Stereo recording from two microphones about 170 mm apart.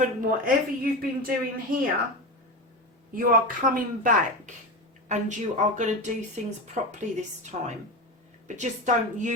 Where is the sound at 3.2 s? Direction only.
55° right (ahead or behind).